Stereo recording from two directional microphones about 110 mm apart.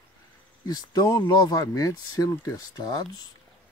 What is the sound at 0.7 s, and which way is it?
Speech, 35° left (ahead or behind).